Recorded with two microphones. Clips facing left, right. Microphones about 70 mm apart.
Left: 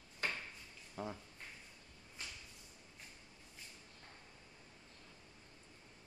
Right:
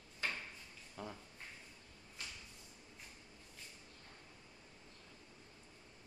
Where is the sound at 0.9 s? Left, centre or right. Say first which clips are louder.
Left 4 dB; centre.